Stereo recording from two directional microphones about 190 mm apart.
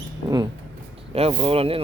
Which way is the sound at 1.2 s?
30° right (ahead or behind).